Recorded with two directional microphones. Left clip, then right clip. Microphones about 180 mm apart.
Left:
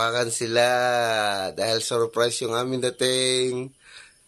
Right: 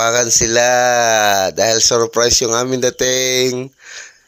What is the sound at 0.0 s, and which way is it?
Speech, 35° right (ahead or behind).